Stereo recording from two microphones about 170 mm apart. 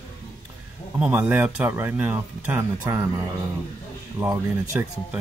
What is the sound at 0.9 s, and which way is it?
Speech, 10° right (ahead or behind).